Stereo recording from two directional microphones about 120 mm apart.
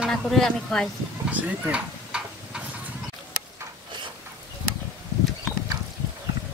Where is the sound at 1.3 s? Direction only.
10° right (ahead or behind).